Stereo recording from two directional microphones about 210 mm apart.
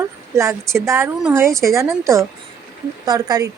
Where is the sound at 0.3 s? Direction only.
15° right (ahead or behind).